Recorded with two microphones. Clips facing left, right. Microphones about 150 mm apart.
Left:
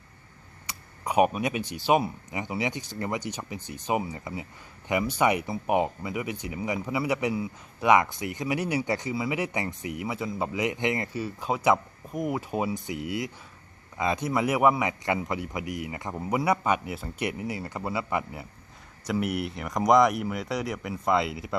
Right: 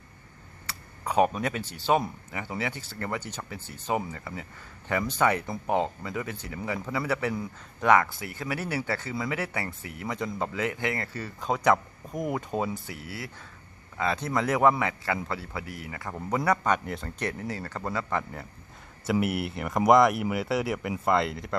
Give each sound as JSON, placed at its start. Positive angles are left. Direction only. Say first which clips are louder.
{"t": 0.7, "sound": "speech", "louder": "left 1 dB", "side_deg": 15}
{"t": 16.2, "sound": "speech", "louder": "even", "side_deg": 10}
{"t": 19.2, "sound": "speech", "louder": "right 1 dB", "side_deg": -5}